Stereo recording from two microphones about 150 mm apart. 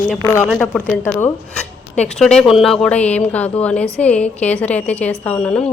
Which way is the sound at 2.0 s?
5° left (ahead or behind).